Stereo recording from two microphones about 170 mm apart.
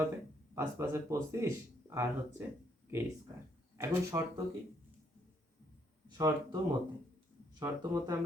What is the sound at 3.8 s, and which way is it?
Speech, 15° right (ahead or behind).